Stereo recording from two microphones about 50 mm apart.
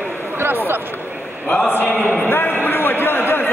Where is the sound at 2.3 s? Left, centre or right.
Left.